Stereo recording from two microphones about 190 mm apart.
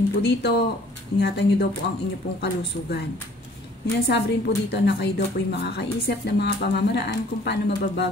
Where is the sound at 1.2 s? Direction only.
60° left (ahead or behind).